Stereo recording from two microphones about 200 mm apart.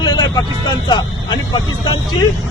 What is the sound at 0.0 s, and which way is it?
Vehicle, 20° left (ahead or behind).